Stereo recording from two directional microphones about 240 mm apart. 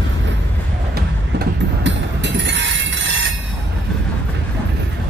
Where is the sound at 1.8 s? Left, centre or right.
Right.